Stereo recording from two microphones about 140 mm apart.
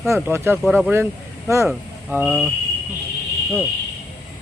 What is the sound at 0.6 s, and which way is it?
Speech, centre (ahead or behind).